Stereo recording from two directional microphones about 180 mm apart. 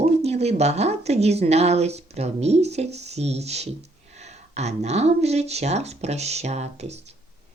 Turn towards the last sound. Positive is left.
turn(degrees=-35)  # may be behind; listen again after turning